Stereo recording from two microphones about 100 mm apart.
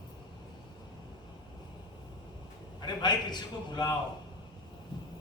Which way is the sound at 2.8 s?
45° left (ahead or behind).